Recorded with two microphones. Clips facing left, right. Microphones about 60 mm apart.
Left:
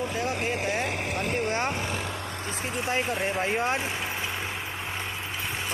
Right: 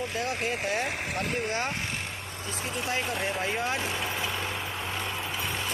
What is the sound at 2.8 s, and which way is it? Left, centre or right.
Speech, left.